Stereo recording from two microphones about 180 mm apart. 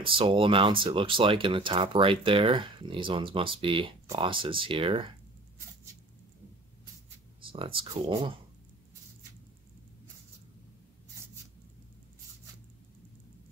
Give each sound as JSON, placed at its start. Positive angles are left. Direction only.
{"t": 0.0, "sound": "speech", "side_deg": -30}
{"t": 7.4, "sound": "speech", "side_deg": -30}